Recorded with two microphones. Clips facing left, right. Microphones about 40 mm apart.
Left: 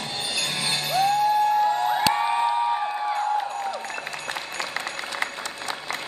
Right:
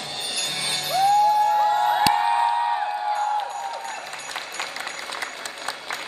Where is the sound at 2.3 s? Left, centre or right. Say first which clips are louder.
Right 1 dB; centre.